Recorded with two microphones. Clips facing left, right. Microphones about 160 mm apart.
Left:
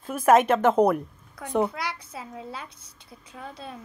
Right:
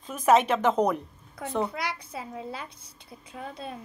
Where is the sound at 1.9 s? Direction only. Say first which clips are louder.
Even; 25° right (ahead or behind).